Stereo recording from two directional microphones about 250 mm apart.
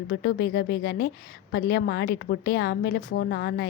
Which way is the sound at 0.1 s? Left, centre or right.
Left.